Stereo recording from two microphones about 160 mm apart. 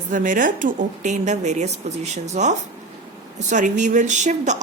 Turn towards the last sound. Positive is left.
turn(degrees=-50)  # may be behind; listen again after turning